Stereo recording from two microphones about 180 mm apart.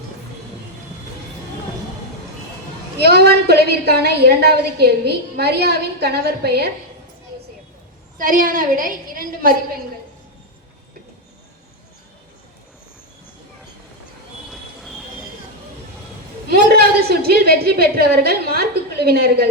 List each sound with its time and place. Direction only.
3.0 s a woman's voice: 65° right (ahead or behind)
8.2 s a woman's voice: 50° right (ahead or behind)
14.5 s train: centre (ahead or behind)
16.5 s a woman's voice: 60° right (ahead or behind)